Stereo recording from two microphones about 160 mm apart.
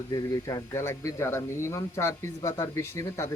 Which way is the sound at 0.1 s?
25° left (ahead or behind).